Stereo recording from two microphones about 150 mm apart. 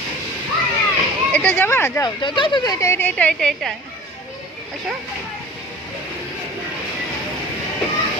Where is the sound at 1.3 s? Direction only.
10° left (ahead or behind).